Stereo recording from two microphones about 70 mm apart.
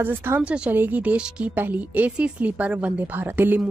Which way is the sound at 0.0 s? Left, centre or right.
Right.